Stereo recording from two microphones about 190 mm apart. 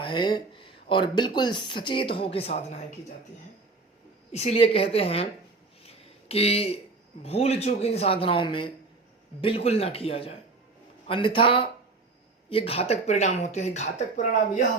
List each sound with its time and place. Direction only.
0.0 s speech: 25° left (ahead or behind)
4.3 s speech: 35° left (ahead or behind)
5.8 s a sound: 30° left (ahead or behind)
7.2 s speech: 35° left (ahead or behind)